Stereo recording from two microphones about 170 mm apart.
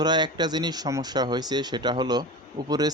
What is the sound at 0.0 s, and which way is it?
Speech, 25° right (ahead or behind).